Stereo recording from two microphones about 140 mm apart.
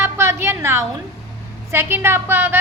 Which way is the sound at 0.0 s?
20° right (ahead or behind).